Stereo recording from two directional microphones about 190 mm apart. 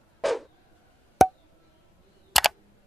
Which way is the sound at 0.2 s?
Centre (ahead or behind).